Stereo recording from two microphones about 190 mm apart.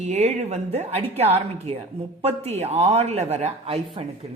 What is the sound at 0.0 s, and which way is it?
A woman's voice, 40° right (ahead or behind).